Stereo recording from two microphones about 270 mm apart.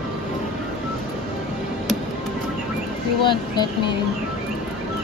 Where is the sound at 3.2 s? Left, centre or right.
Centre.